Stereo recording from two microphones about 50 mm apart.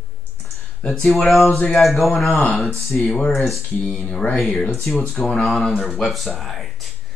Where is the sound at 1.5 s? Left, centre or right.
Centre.